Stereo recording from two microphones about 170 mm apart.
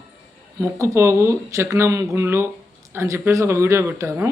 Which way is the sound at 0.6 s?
15° right (ahead or behind).